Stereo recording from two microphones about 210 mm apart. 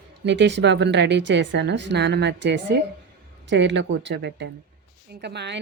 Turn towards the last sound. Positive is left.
turn(degrees=-55)  # may be behind; listen again after turning